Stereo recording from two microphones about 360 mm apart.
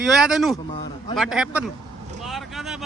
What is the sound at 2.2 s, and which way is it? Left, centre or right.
Vehicle, centre.